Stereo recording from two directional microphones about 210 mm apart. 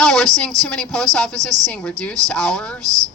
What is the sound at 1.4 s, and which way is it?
Speech, 15° right (ahead or behind).